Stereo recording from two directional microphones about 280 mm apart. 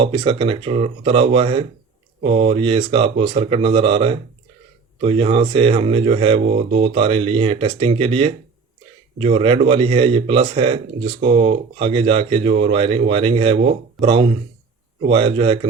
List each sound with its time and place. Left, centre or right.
0.0 s a man's voice: centre